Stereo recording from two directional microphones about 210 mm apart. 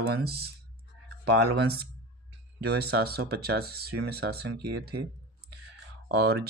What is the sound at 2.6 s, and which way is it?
Speech, 50° right (ahead or behind).